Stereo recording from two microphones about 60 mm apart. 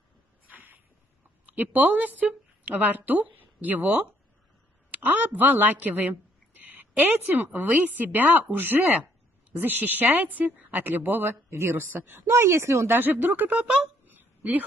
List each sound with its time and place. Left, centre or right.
0.5 s a sound: right
1.4 s speech: right
5.2 s a woman's voice: right
12.3 s speech: right
12.9 s speech: right